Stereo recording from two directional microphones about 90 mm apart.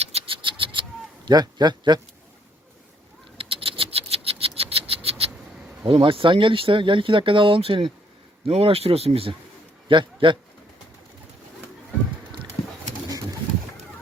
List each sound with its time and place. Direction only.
0.3 s a sound: 75° right (ahead or behind); by 2.0 s 50° right (ahead or behind)
3.3 s rodents: 90° right
5.8 s speech: 85° right
8.4 s speech: 90° right
9.9 s a man's voice: 65° right (ahead or behind)